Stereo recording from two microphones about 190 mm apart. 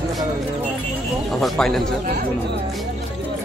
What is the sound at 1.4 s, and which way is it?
Speech, centre (ahead or behind).